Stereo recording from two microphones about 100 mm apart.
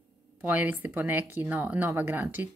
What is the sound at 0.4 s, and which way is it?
Speech, 15° right (ahead or behind).